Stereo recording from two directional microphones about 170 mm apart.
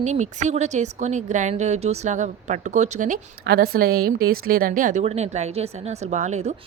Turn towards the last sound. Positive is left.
turn(degrees=-40)  # may be behind; listen again after turning